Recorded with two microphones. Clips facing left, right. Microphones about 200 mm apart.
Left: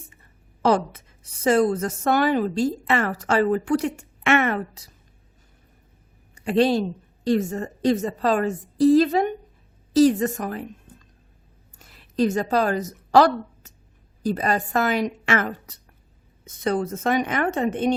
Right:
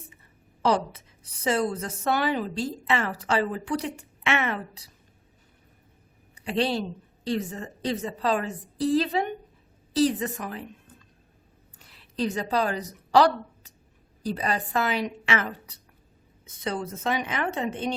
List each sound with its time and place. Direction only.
0.6 s a woman's voice: 50° left (ahead or behind)
6.3 s a woman's voice: 45° left (ahead or behind)
11.8 s a sound: 45° left (ahead or behind)
14.2 s a woman's voice: 45° left (ahead or behind)